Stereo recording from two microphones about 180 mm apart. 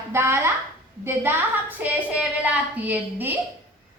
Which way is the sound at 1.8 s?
10° right (ahead or behind).